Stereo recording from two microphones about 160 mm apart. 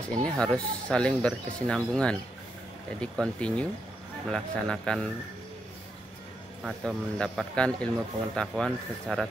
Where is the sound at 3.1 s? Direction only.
5° left (ahead or behind).